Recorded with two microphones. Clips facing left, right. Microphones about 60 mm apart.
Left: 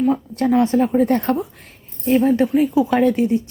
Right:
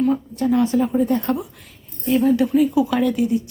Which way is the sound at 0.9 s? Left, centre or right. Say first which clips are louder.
Left 3 dB; left.